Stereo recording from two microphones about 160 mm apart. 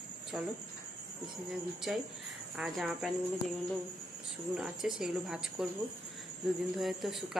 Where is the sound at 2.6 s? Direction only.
Centre (ahead or behind).